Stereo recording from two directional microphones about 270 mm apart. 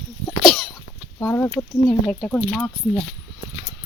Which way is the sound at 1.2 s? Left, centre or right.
Centre.